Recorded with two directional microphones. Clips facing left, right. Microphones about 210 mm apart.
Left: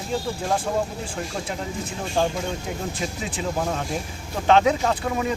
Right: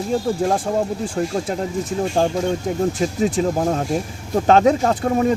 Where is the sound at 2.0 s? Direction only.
40° right (ahead or behind).